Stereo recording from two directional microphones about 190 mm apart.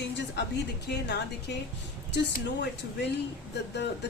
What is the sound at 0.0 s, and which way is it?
A woman's voice, 65° left (ahead or behind).